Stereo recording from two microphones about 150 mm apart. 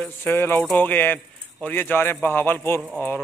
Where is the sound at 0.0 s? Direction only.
15° left (ahead or behind).